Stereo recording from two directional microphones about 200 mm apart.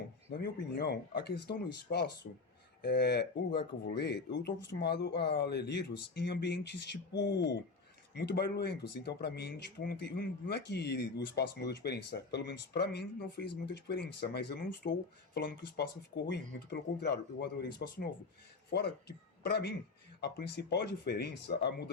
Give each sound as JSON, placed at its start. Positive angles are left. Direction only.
{"t": 0.4, "sound": "speech", "side_deg": 55}